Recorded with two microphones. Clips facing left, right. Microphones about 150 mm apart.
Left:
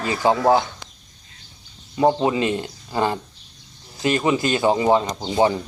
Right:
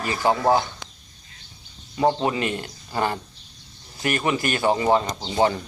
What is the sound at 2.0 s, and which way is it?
A man's voice, 10° left (ahead or behind).